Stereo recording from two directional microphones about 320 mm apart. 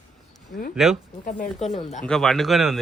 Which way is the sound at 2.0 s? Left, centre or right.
Centre.